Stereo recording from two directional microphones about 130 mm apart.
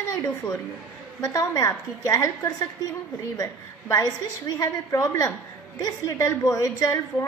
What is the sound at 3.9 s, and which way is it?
A woman's voice, 25° left (ahead or behind).